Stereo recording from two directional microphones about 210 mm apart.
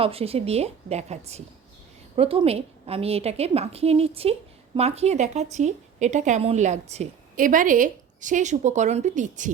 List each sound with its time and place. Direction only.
0.0 s a woman's voice: 25° right (ahead or behind)